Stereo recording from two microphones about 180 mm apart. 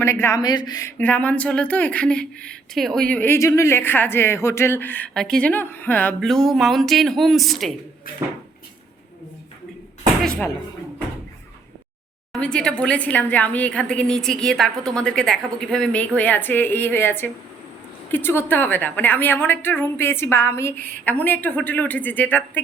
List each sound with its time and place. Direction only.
0.0 s a woman's voice: 15° left (ahead or behind)
10.2 s a woman's voice: 5° left (ahead or behind)
12.3 s a woman's voice: 5° left (ahead or behind)